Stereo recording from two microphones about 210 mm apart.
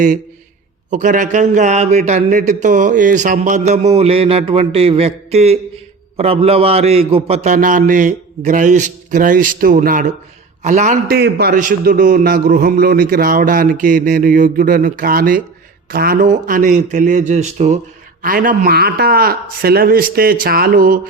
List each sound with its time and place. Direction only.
0.9 s a man's voice: 35° right (ahead or behind)
11.1 s a man's voice: 50° right (ahead or behind)